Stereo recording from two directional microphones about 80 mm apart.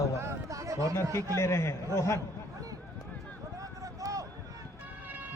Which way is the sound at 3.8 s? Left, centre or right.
Right.